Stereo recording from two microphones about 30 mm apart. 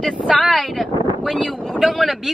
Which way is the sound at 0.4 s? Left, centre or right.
Centre.